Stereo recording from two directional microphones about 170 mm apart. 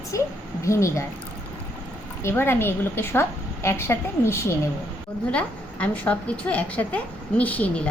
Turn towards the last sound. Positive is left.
turn(degrees=10)  # may be behind; listen again after turning